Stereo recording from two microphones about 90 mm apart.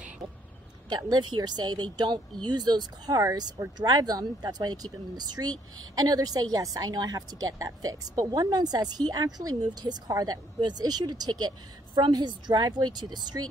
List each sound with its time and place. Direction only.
0.8 s speech: 50° right (ahead or behind)